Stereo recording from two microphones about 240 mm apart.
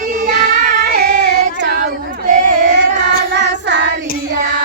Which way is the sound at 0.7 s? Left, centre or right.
Right.